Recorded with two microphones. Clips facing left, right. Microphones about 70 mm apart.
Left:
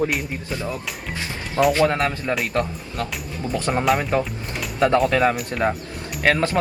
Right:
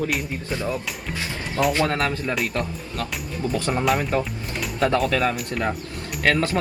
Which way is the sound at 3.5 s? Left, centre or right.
Left.